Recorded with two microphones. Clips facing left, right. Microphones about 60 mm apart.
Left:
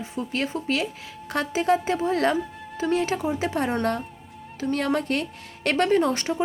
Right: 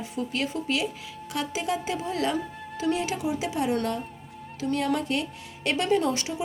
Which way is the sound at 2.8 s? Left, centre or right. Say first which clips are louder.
Left 3 dB; left.